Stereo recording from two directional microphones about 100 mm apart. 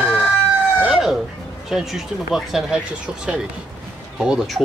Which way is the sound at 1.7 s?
5° right (ahead or behind).